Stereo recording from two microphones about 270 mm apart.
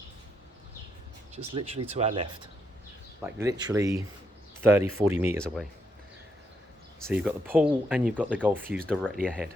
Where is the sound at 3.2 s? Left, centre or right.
Centre.